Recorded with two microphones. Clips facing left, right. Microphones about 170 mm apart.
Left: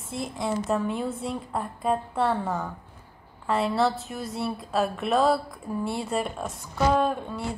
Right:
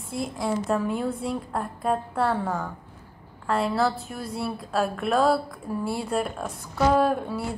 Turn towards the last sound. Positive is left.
turn(degrees=-5)  # may be behind; listen again after turning